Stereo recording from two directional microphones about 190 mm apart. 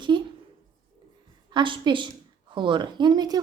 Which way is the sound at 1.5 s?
25° right (ahead or behind).